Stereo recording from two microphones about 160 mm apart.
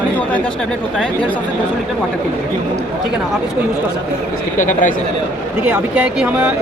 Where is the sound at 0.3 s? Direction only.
10° left (ahead or behind).